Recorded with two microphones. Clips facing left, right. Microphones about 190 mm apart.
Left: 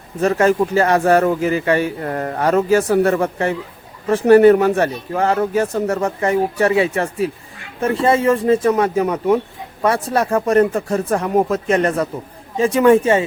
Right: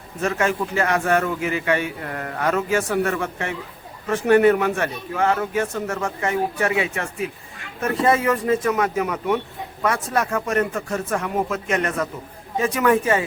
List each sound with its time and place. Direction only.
0.2 s a man's voice: 35° left (ahead or behind)